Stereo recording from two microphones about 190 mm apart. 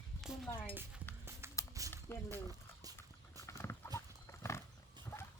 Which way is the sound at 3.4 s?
15° left (ahead or behind).